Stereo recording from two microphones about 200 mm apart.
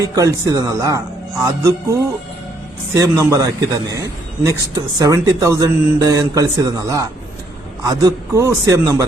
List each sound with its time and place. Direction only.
0.0 s a man's voice: 15° right (ahead or behind)